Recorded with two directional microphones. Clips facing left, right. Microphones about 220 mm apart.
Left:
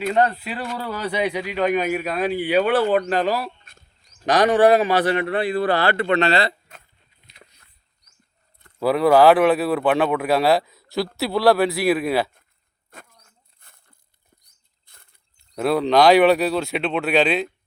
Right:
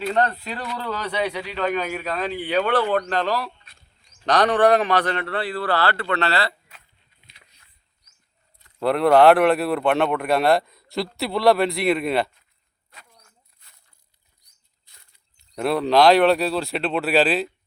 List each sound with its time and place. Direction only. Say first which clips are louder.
0.1 s a man's voice: left 3 dB; 10° left (ahead or behind)
3.6 s bird: left 3 dB; 45° left (ahead or behind)
4.3 s a man's voice: left 2 dB; 10° left (ahead or behind)
8.8 s speech: left 1 dB; centre (ahead or behind)
12.9 s a sound: left 6 dB; 50° left (ahead or behind)
15.5 s speech: left 1 dB; centre (ahead or behind)